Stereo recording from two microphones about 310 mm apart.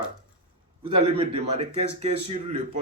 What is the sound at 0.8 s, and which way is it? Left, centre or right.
A man's voice, centre.